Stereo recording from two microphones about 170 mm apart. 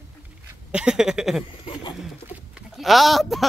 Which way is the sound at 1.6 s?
25° left (ahead or behind).